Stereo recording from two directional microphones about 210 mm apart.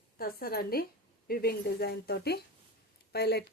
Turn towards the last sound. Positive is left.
turn(degrees=50)  # may be behind; listen again after turning